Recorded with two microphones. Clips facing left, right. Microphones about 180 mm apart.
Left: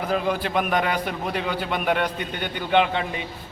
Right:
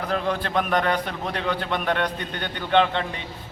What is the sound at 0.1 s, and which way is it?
A man's voice, 5° left (ahead or behind).